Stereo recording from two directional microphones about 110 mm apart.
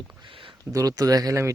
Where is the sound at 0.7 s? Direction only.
30° right (ahead or behind).